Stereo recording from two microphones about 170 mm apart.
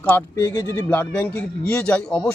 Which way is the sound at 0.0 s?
10° left (ahead or behind).